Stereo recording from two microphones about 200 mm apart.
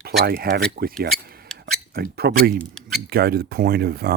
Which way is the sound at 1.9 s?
50° right (ahead or behind).